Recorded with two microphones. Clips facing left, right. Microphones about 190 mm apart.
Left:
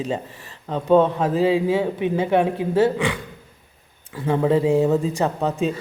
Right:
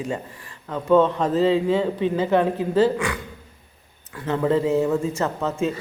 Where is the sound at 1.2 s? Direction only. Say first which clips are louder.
Even; 10° left (ahead or behind).